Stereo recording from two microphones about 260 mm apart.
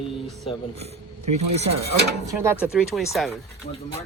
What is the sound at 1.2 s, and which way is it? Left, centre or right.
Speech, right.